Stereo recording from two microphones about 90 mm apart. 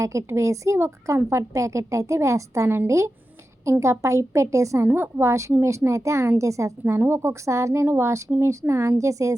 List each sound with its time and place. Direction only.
0.0 s a woman's voice: 35° right (ahead or behind)
4.9 s a woman's voice: 25° right (ahead or behind)